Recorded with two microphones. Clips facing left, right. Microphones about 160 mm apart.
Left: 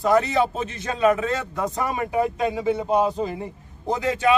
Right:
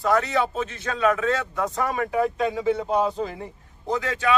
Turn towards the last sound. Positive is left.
turn(degrees=20)  # may be behind; listen again after turning